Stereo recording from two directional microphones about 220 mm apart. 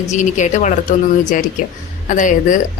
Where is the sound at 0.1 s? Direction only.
35° left (ahead or behind).